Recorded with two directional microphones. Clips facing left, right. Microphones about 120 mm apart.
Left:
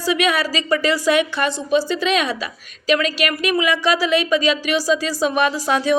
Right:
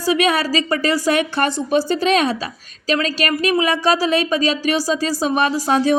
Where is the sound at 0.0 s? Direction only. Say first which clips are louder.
Right 2 dB; 35° right (ahead or behind).